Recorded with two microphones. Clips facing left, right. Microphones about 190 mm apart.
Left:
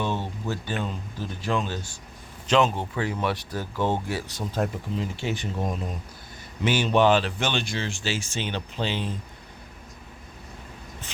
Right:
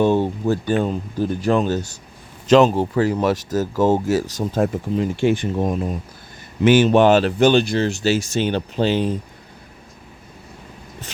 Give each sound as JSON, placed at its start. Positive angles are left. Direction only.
{"t": 0.0, "sound": "speech", "side_deg": -40}
{"t": 6.7, "sound": "speech", "side_deg": -50}